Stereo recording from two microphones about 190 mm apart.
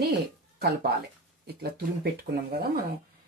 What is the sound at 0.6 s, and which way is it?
Speech, 55° right (ahead or behind).